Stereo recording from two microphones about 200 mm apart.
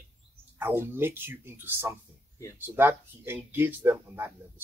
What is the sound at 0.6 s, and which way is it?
Speech, 10° right (ahead or behind).